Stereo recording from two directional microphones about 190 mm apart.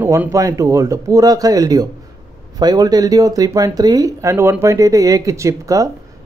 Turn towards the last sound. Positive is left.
turn(degrees=-15)  # may be behind; listen again after turning